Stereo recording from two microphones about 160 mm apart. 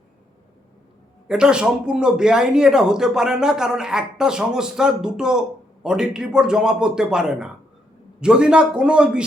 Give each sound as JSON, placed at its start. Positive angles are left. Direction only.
{"t": 1.3, "sound": "speech", "side_deg": -5}